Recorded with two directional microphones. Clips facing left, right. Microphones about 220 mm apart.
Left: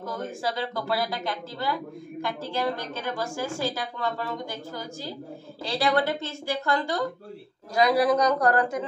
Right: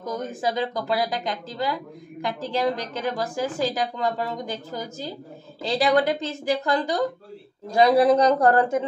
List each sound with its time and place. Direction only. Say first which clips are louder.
0.0 s a woman's voice: right 3 dB; 20° right (ahead or behind)